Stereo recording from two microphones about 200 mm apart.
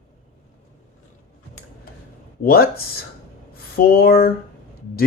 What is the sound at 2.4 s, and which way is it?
Speech, 50° left (ahead or behind).